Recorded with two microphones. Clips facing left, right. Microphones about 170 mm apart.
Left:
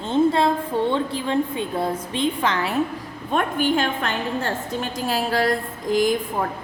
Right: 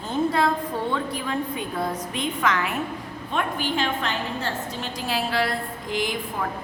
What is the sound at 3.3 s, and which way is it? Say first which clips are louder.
A woman's voice: left 5 dB; 50° left (ahead or behind).